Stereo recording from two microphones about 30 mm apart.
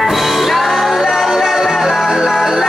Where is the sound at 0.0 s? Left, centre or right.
Centre.